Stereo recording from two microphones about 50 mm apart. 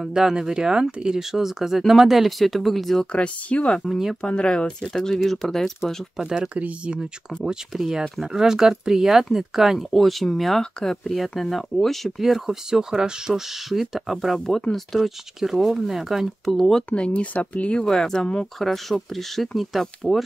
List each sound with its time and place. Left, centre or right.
0.0 s speech: centre
3.0 s speech: left
6.1 s speech: centre
6.5 s speech: right; by 9.8 s centre
9.8 s speech: centre
11.1 s speech: centre
12.2 s speech: centre
16.5 s speech: centre
16.9 s speech: left
17.8 s speech: centre
18.2 s speech: centre
18.6 s speech: centre